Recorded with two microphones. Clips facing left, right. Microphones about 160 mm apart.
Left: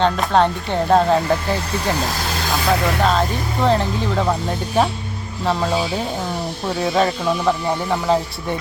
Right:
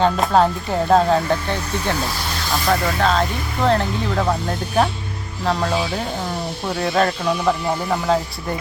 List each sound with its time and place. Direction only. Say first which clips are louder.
0.0 s speech: even; 5° right (ahead or behind)
3.0 s speech: left 1 dB; centre (ahead or behind)
6.8 s speech: left 1 dB; 5° left (ahead or behind)